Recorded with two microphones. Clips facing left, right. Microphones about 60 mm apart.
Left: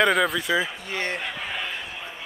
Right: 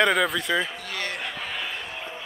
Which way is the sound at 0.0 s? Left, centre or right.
Centre.